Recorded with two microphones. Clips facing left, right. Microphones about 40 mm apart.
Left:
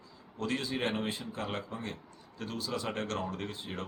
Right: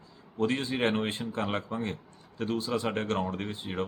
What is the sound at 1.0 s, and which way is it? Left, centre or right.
Speech, right.